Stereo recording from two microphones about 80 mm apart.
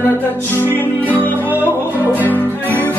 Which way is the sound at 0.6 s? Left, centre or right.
Left.